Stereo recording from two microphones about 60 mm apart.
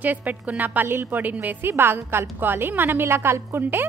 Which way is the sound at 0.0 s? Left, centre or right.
Right.